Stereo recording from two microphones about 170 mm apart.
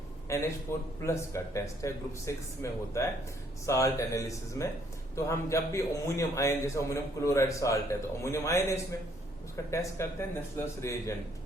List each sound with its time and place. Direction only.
0.3 s a man's voice: 20° left (ahead or behind)